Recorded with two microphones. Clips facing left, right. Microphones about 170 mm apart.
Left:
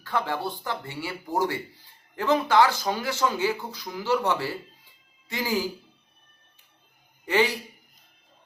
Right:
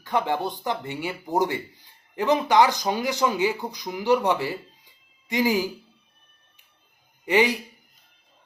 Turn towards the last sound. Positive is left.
turn(degrees=-15)  # may be behind; listen again after turning